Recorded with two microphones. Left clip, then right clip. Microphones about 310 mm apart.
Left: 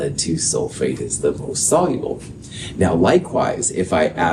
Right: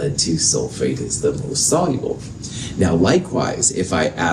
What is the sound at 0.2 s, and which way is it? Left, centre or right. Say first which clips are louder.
Speech: right 2 dB; left.